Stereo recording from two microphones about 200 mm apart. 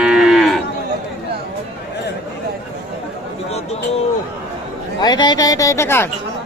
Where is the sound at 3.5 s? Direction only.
30° left (ahead or behind).